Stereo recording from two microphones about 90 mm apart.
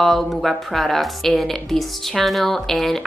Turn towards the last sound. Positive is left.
turn(degrees=0)  # may be behind; listen again after turning